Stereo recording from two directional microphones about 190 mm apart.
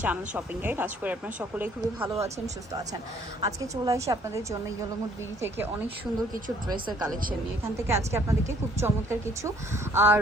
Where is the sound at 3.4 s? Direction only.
20° right (ahead or behind).